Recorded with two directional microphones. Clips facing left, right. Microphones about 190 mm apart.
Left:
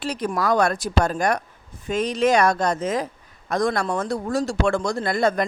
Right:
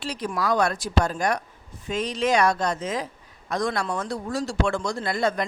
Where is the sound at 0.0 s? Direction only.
50° left (ahead or behind).